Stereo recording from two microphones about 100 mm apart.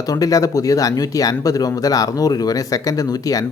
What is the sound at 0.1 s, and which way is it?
Speech, 35° left (ahead or behind).